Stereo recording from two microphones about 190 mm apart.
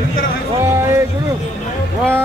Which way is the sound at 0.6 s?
15° right (ahead or behind).